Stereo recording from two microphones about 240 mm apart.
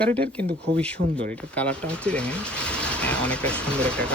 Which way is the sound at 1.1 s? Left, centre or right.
Centre.